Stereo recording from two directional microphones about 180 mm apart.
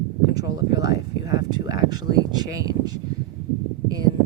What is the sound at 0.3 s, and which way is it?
A woman's voice, 20° right (ahead or behind).